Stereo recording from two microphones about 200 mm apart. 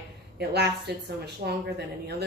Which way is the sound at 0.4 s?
55° right (ahead or behind).